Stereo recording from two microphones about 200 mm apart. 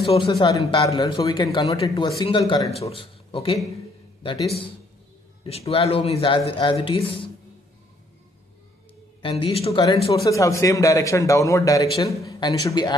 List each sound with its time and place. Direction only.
0.0 s speech: 25° left (ahead or behind)
5.4 s speech: 30° left (ahead or behind)
9.2 s speech: 30° left (ahead or behind)
10.1 s a man's voice: 15° left (ahead or behind)